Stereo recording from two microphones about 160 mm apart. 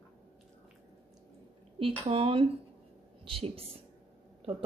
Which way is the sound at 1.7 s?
35° right (ahead or behind).